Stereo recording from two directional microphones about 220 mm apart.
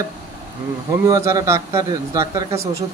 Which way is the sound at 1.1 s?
15° right (ahead or behind).